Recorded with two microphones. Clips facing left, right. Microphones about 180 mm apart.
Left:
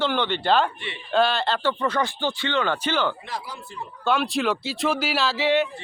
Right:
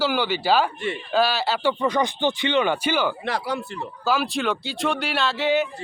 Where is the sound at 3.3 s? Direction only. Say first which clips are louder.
Right 8 dB; 70° right (ahead or behind).